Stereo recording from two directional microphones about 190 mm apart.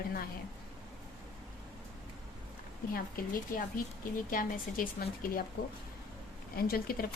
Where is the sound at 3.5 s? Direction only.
45° left (ahead or behind).